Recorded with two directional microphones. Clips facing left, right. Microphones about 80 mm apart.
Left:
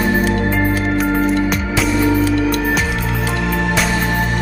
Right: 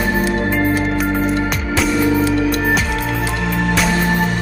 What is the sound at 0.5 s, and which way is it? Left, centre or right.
Music, centre.